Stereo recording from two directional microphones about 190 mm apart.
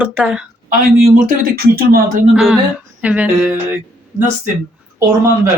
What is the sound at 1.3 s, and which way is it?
Speech, 55° right (ahead or behind).